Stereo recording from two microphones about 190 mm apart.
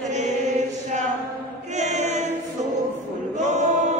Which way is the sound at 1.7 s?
40° right (ahead or behind).